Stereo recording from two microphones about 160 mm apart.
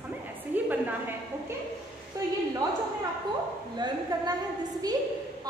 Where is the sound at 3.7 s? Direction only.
25° right (ahead or behind).